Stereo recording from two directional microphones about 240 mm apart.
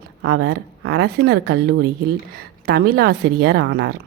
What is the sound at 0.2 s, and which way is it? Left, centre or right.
A woman's voice, right.